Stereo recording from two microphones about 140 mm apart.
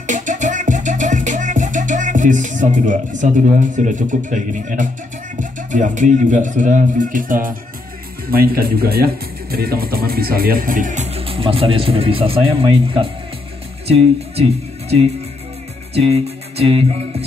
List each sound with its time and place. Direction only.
0.0 s music: 65° right (ahead or behind)
5.4 s speech: 65° right (ahead or behind)
8.3 s speech: 90° right; by 14.4 s 45° right (ahead or behind)
15.9 s music: 45° right (ahead or behind)